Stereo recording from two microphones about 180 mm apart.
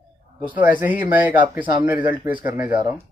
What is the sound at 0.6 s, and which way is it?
Speech, 10° right (ahead or behind).